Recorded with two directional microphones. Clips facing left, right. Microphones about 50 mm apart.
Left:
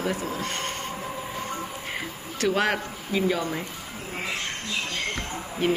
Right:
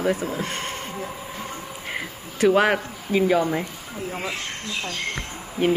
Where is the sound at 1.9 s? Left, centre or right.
Centre.